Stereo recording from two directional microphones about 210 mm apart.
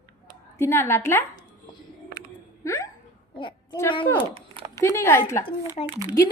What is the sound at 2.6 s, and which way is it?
Hiccup, 15° left (ahead or behind).